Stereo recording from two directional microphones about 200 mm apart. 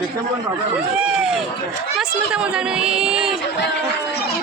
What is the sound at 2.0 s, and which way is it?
A woman's voice, 5° right (ahead or behind).